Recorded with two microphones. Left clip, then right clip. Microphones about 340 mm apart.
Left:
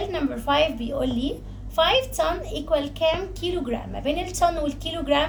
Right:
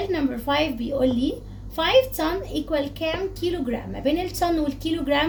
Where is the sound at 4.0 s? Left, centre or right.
Centre.